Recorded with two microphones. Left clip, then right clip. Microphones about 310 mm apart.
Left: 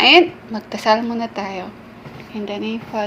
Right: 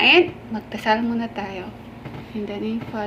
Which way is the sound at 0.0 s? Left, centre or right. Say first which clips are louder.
Left 4 dB; left.